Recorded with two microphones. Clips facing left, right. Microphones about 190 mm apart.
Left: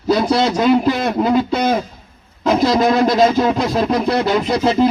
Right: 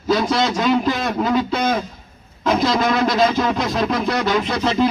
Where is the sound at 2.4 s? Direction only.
30° left (ahead or behind).